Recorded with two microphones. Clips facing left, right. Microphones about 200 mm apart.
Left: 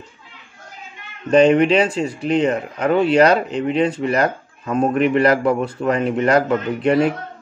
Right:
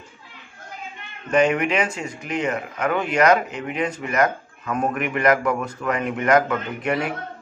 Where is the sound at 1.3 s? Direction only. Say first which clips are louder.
Left 7 dB; 30° left (ahead or behind).